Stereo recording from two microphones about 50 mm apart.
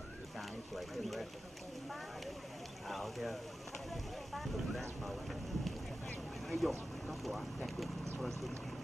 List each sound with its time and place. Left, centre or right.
0.4 s a sound: centre
2.9 s speech: centre
3.9 s vehicle: centre
6.5 s speech: centre